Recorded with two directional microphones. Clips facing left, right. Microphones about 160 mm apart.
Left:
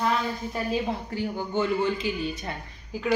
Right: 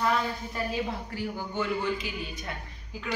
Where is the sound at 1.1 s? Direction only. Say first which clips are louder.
Left 6 dB; 25° left (ahead or behind).